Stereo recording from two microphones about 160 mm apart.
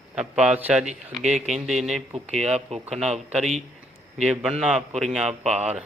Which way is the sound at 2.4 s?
40° right (ahead or behind).